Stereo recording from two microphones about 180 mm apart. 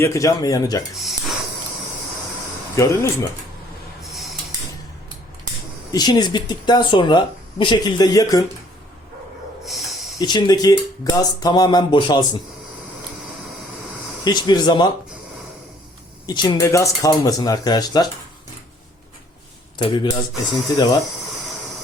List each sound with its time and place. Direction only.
0.0 s speech: 15° left (ahead or behind)
2.7 s speech: 15° left (ahead or behind)
4.0 s snort: centre (ahead or behind)
5.9 s speech: 20° left (ahead or behind)
9.6 s hiss: centre (ahead or behind)
10.2 s speech: 20° left (ahead or behind)
14.3 s speech: 20° left (ahead or behind)
16.2 s speech: 25° left (ahead or behind)
19.9 s speech: 25° left (ahead or behind)